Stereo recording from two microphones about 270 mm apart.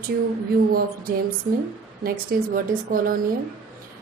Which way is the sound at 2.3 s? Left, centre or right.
Right.